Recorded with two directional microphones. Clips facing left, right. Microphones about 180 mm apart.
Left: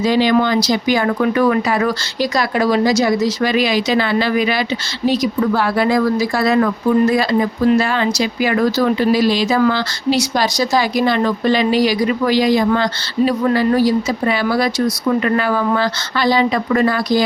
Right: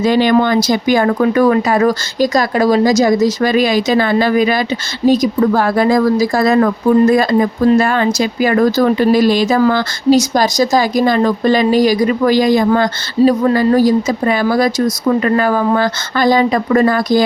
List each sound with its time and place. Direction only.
0.0 s speech: 50° right (ahead or behind)